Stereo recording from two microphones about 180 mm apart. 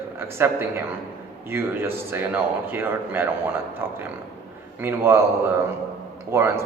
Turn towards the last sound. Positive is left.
turn(degrees=-15)  # may be behind; listen again after turning